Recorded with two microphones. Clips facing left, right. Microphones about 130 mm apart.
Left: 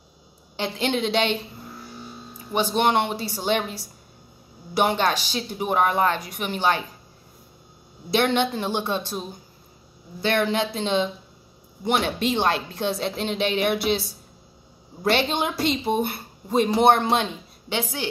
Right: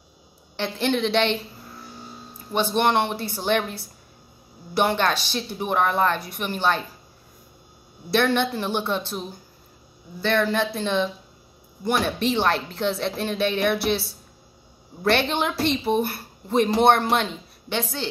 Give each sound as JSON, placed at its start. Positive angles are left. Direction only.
{"t": 0.6, "sound": "a woman's voice", "side_deg": 15}
{"t": 2.5, "sound": "a woman's voice", "side_deg": 10}
{"t": 8.1, "sound": "a woman's voice", "side_deg": 15}
{"t": 10.2, "sound": "a woman's voice", "side_deg": 15}
{"t": 15.0, "sound": "a woman's voice", "side_deg": 15}